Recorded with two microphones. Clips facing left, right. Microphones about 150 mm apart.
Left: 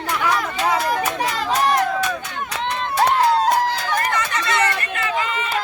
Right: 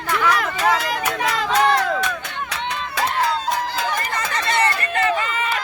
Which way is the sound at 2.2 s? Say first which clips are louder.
Left 2 dB; 90° right.